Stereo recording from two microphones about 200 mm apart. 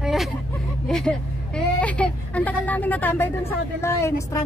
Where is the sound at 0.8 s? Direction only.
5° left (ahead or behind).